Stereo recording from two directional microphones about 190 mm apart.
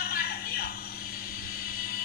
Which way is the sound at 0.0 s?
50° left (ahead or behind).